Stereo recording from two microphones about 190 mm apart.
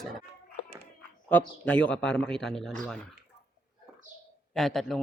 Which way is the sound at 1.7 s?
5° left (ahead or behind).